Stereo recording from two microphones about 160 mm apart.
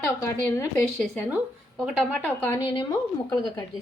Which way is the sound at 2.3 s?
10° left (ahead or behind).